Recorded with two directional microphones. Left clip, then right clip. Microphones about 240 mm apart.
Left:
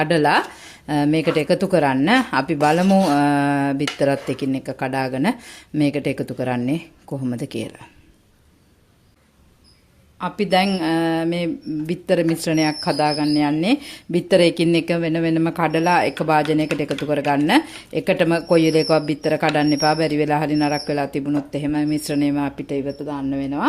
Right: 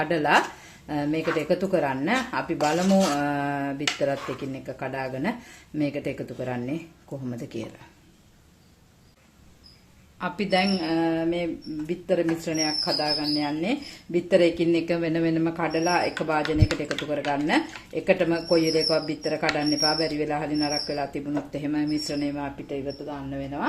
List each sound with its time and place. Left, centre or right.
0.0 s speech: left
10.2 s speech: left